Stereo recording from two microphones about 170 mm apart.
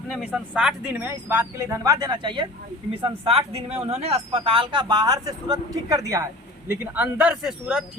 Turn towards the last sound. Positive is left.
turn(degrees=-5)  # may be behind; listen again after turning